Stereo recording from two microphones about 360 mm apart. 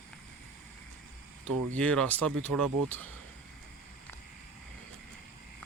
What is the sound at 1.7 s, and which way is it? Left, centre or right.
Speech, centre.